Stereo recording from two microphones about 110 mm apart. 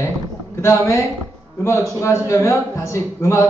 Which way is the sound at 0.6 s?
30° left (ahead or behind).